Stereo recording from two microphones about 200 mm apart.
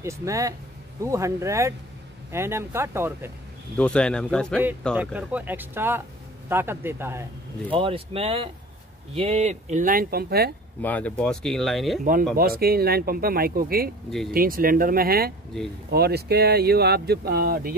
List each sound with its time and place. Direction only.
0.0 s speech: 15° right (ahead or behind)
3.7 s speech: 5° left (ahead or behind)
4.9 s speech: 5° right (ahead or behind)
7.7 s speech: 25° right (ahead or behind); by 10.5 s 50° right (ahead or behind)
10.8 s speech: 5° left (ahead or behind)
12.0 s speech: 45° right (ahead or behind)